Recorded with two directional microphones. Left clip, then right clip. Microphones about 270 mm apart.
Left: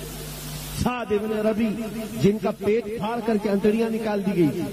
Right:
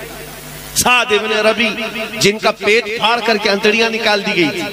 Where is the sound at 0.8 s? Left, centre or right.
Centre.